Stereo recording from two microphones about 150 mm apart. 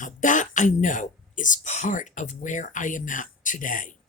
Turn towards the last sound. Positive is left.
turn(degrees=60)  # may be behind; listen again after turning